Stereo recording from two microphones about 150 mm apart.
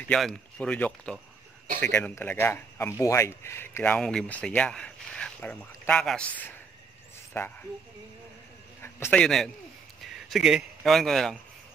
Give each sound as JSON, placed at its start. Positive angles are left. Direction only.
{"t": 0.1, "sound": "speech", "side_deg": 5}
{"t": 8.8, "sound": "a man's voice", "side_deg": 10}